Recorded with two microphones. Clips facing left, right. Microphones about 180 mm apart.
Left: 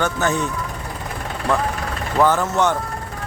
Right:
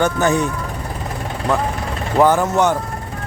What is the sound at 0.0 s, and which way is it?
Speech, 15° right (ahead or behind).